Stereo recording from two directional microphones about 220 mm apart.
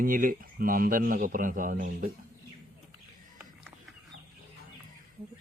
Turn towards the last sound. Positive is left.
turn(degrees=-5)  # may be behind; listen again after turning